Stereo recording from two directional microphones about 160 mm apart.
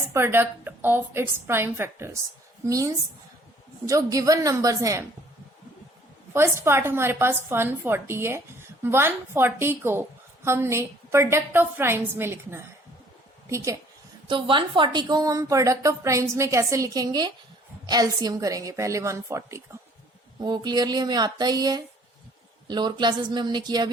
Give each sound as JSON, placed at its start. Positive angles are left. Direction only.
{"t": 0.1, "sound": "a woman's voice", "side_deg": -15}
{"t": 6.3, "sound": "a woman's voice", "side_deg": -15}
{"t": 14.3, "sound": "a woman's voice", "side_deg": -30}